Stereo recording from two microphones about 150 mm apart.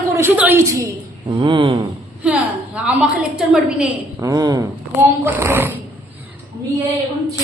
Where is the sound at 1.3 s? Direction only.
30° right (ahead or behind).